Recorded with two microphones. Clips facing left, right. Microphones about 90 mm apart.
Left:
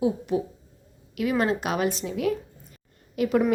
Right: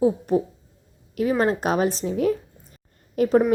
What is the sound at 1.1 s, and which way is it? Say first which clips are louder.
Speech: right 3 dB; 35° right (ahead or behind).